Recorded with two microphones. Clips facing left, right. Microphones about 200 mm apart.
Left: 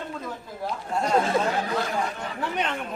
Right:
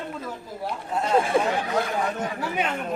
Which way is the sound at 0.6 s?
5° right (ahead or behind).